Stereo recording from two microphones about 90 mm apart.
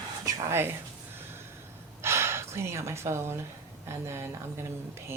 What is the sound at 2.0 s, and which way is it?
Gasp, 30° right (ahead or behind).